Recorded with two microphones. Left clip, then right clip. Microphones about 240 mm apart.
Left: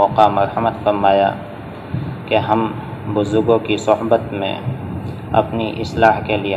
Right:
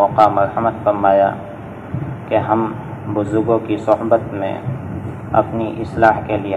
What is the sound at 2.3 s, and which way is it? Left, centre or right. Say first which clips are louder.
A man's voice: even; left.